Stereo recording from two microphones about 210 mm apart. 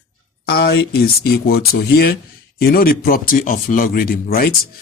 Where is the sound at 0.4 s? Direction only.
50° left (ahead or behind).